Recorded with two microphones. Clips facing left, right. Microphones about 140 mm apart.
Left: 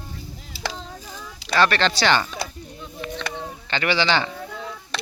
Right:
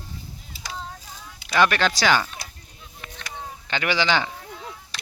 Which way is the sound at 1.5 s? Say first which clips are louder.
Left 1 dB; 10° right (ahead or behind).